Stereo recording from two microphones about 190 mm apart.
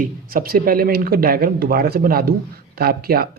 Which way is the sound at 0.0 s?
50° right (ahead or behind).